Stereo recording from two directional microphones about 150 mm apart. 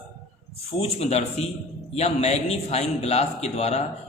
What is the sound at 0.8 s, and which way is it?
A man's voice, 45° left (ahead or behind).